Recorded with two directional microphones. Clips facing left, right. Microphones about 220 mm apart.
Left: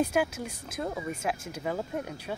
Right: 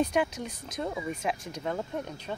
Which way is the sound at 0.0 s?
5° left (ahead or behind).